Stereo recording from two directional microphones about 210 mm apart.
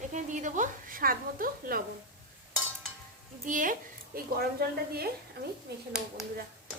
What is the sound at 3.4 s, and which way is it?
A woman's voice, 40° right (ahead or behind).